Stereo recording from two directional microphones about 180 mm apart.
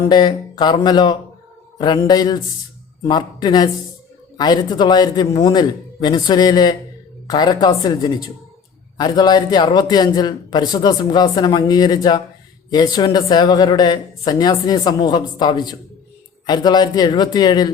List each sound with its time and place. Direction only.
0.0 s a man's voice: 25° left (ahead or behind)